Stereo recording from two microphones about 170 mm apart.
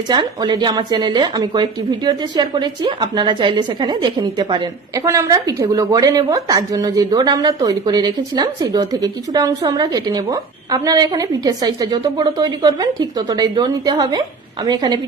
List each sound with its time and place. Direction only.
0.1 s a woman's voice: 25° right (ahead or behind)